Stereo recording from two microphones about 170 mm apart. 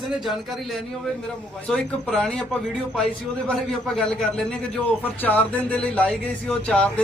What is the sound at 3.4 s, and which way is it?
A man's voice, 5° left (ahead or behind).